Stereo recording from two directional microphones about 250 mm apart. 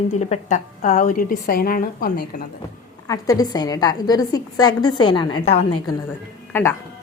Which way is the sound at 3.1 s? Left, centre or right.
Centre.